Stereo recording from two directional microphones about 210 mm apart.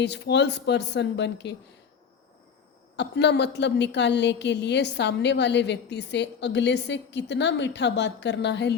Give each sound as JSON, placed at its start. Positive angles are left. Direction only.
{"t": 0.0, "sound": "a woman's voice", "side_deg": 55}
{"t": 2.9, "sound": "a woman's voice", "side_deg": 55}